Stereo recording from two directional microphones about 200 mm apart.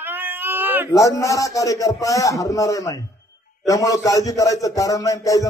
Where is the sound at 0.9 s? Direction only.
15° left (ahead or behind).